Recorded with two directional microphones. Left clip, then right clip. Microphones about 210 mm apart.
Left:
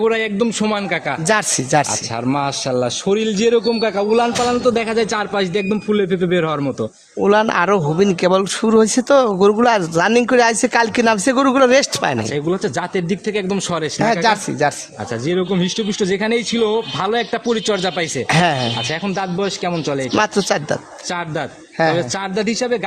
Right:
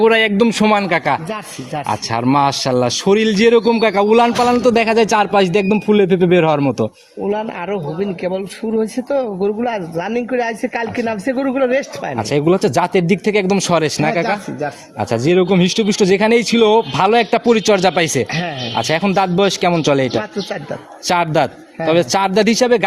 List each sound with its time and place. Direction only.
0.0 s a man's voice: 20° right (ahead or behind)
7.2 s a man's voice: 50° left (ahead or behind)
12.3 s a man's voice: 25° right (ahead or behind)
15.1 s a man's voice: 30° right (ahead or behind)
18.3 s a man's voice: 45° left (ahead or behind)
18.8 s a man's voice: 35° right (ahead or behind)
21.1 s a man's voice: 35° right (ahead or behind)